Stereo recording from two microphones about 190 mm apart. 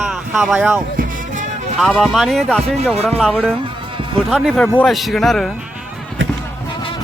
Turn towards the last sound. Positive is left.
turn(degrees=0)  # may be behind; listen again after turning